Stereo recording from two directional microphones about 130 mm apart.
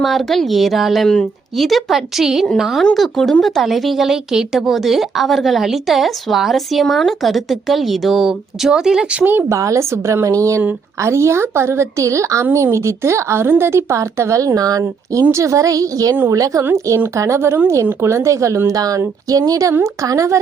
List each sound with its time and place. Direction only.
0.0 s a woman's voice: centre (ahead or behind); by 20.4 s 25° right (ahead or behind)